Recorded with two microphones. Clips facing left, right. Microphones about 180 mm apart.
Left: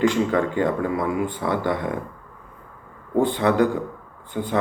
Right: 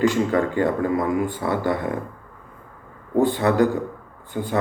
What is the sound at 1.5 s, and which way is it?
Speech, 45° right (ahead or behind).